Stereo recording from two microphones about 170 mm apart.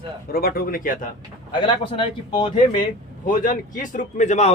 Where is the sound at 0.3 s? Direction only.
60° left (ahead or behind).